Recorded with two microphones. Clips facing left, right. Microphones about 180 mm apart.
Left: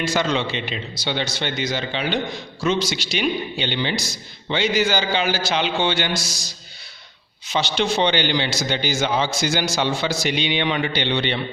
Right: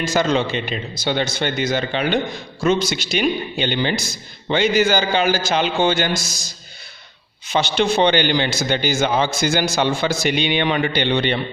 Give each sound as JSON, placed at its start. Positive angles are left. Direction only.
{"t": 0.0, "sound": "a man's voice", "side_deg": -45}